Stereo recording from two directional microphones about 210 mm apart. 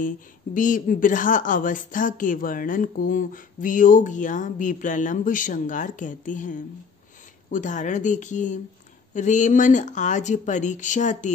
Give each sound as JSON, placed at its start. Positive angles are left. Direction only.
{"t": 0.6, "sound": "a woman's voice", "side_deg": 40}